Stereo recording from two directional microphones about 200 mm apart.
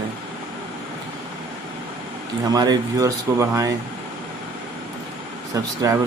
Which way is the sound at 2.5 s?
20° right (ahead or behind).